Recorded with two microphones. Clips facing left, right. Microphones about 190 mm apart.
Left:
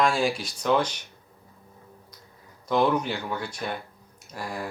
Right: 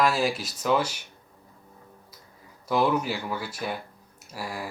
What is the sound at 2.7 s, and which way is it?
Speech, 5° right (ahead or behind).